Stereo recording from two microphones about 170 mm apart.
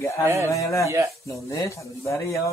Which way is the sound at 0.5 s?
20° left (ahead or behind).